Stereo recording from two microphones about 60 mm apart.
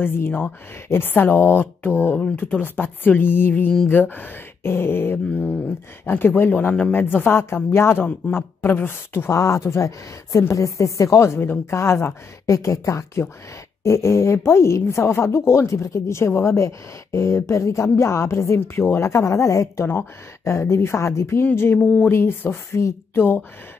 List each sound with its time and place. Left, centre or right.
0.0 s speech: left
9.3 s speech: left
12.4 s speech: left
19.9 s speech: left
20.5 s speech: left
21.7 s speech: left
22.1 s speech: left
23.1 s speech: left